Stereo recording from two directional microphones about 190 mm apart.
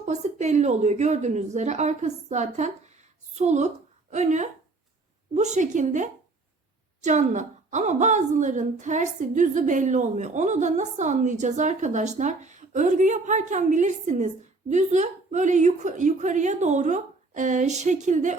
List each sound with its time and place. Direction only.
0.0 s a woman's voice: 35° right (ahead or behind)